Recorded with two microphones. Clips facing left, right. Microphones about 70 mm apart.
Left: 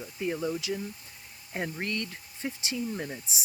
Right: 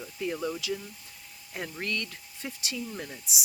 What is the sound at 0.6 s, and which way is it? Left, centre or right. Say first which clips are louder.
Speech: left 1 dB; left.